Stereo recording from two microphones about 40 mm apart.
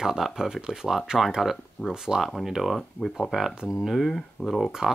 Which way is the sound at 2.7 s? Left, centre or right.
Centre.